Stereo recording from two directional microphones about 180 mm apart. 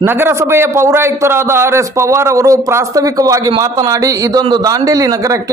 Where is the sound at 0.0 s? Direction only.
10° right (ahead or behind).